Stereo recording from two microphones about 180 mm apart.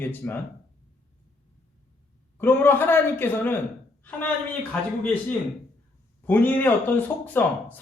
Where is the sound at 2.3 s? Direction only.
10° left (ahead or behind).